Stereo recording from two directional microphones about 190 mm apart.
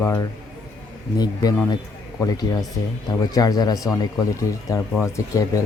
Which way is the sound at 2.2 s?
20° left (ahead or behind).